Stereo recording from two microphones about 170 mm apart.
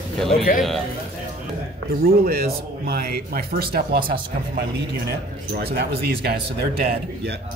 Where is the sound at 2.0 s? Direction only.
60° right (ahead or behind).